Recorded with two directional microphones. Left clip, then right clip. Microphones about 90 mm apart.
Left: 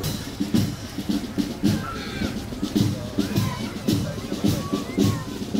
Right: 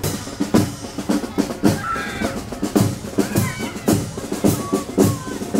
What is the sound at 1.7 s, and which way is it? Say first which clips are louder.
Crow: right 5 dB; 40° right (ahead or behind).